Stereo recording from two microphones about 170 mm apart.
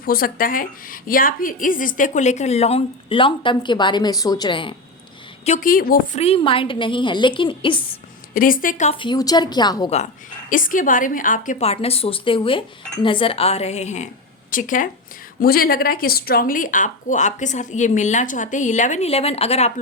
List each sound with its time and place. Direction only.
0.0 s a woman's voice: 60° left (ahead or behind); by 4.7 s 30° left (ahead or behind)
5.5 s a woman's voice: 55° left (ahead or behind)
6.1 s a woman's voice: 35° left (ahead or behind)
8.3 s a woman's voice: 55° left (ahead or behind)
8.9 s a woman's voice: 30° left (ahead or behind)
10.5 s a woman's voice: 50° left (ahead or behind)
11.6 s a woman's voice: 35° left (ahead or behind)